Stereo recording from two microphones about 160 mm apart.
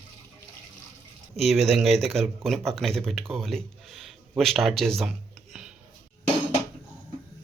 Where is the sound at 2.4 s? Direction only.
Centre (ahead or behind).